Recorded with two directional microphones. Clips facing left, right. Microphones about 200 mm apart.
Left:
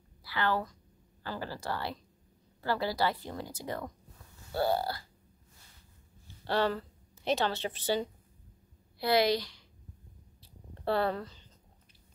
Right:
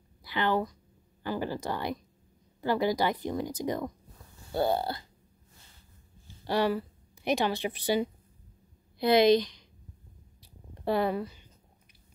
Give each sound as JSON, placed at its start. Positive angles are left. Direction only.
{"t": 0.2, "sound": "a woman's voice", "side_deg": -20}
{"t": 6.4, "sound": "a woman's voice", "side_deg": -10}
{"t": 10.4, "sound": "a sound", "side_deg": -15}